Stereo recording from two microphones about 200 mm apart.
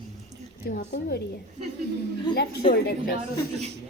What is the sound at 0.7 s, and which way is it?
Speech, 50° left (ahead or behind).